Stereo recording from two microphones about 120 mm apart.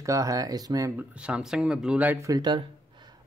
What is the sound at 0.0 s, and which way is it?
Speech, 30° right (ahead or behind).